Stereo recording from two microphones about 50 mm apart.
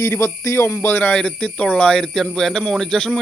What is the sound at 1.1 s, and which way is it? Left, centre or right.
A man's voice, left.